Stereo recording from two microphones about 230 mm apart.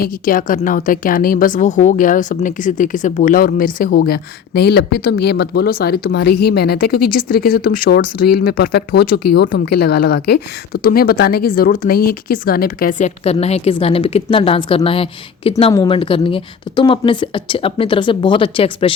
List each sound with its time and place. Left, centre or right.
0.0 s a woman's voice: left